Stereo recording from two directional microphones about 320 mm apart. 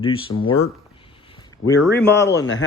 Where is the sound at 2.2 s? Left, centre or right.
Left.